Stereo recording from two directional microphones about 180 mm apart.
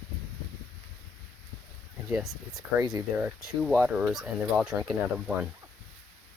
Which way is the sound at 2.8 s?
20° right (ahead or behind).